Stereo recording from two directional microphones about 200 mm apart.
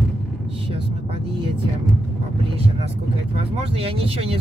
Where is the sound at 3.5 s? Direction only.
30° right (ahead or behind).